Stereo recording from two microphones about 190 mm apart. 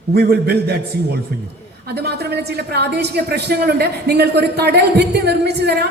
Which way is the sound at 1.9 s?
60° right (ahead or behind).